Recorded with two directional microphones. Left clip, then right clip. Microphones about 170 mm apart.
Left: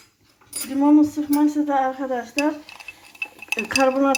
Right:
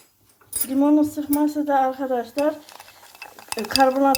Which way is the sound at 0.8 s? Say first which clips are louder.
Left 2 dB; 30° right (ahead or behind).